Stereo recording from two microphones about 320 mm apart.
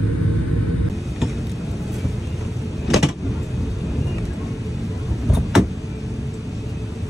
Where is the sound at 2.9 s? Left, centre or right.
Centre.